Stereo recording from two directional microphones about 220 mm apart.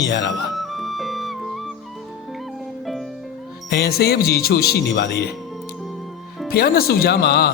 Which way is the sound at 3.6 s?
45° left (ahead or behind).